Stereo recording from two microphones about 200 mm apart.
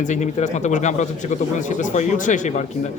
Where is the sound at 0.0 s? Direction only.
35° left (ahead or behind).